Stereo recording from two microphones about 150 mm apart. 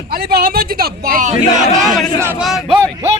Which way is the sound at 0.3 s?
85° right.